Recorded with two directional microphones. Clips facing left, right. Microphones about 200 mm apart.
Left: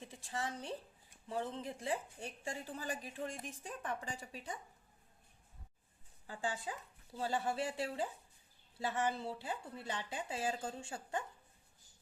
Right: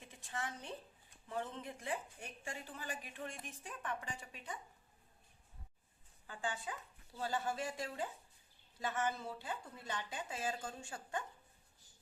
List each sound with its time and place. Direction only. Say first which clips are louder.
0.0 s a woman's voice: left 3 dB; 30° left (ahead or behind)
6.2 s speech: left 2 dB; 35° left (ahead or behind)